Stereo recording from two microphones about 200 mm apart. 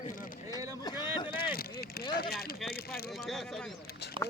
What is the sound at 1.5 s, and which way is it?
Vehicle, 50° left (ahead or behind).